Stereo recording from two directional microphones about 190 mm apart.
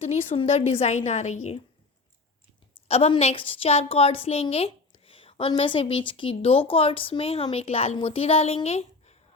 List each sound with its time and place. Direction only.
0.0 s a woman's voice: 30° left (ahead or behind)
2.7 s a woman's voice: 35° left (ahead or behind)